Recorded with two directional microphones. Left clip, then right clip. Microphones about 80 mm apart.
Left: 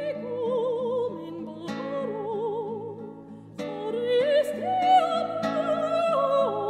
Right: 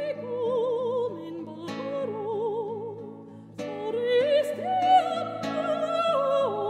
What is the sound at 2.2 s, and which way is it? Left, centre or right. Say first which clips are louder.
Music: even; right.